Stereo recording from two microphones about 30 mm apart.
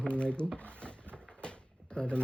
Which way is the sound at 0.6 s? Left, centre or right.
Left.